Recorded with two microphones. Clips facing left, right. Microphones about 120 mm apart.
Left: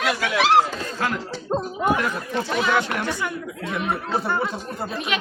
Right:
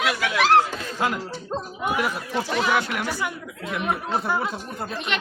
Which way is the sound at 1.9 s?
10° right (ahead or behind).